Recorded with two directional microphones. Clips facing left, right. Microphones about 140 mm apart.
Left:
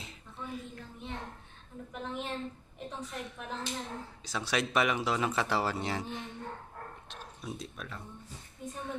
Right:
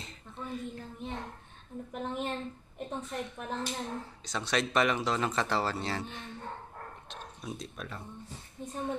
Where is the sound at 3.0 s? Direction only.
Centre (ahead or behind); by 6.3 s 15° left (ahead or behind).